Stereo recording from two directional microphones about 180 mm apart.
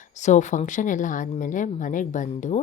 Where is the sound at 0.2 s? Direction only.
40° left (ahead or behind).